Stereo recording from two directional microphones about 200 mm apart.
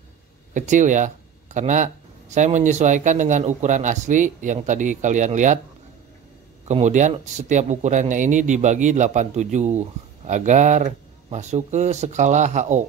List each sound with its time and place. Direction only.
0.6 s speech: 40° right (ahead or behind)
6.7 s speech: 35° right (ahead or behind)